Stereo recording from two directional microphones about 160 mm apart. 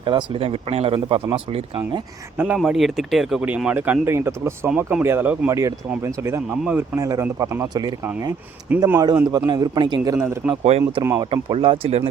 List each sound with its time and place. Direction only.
0.0 s speech: 30° right (ahead or behind)
2.6 s a man's voice: centre (ahead or behind); by 10.2 s 25° right (ahead or behind)
10.2 s speech: 15° right (ahead or behind)
10.6 s speech: 40° right (ahead or behind)
11.0 s speech: 15° right (ahead or behind)
11.3 s speech: 35° right (ahead or behind)